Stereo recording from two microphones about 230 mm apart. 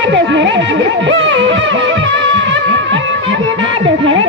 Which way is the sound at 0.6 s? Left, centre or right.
Right.